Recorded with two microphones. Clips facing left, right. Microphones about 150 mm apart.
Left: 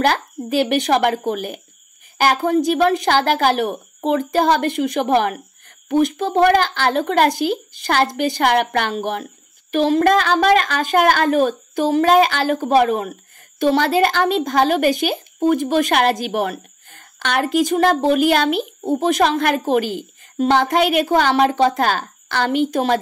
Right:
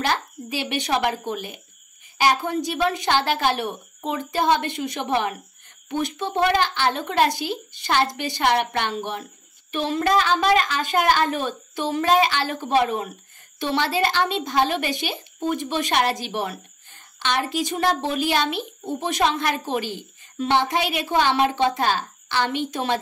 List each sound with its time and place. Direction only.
0.0 s speech: 50° left (ahead or behind)